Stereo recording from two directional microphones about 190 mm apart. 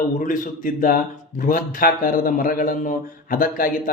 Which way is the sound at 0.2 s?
45° left (ahead or behind).